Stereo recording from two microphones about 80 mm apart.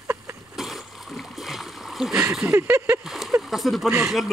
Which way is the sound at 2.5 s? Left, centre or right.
Right.